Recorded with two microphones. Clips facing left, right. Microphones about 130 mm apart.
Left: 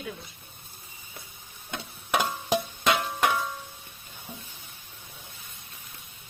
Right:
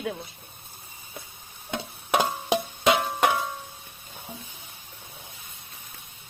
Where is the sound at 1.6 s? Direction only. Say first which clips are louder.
Right 4 dB; 20° right (ahead or behind).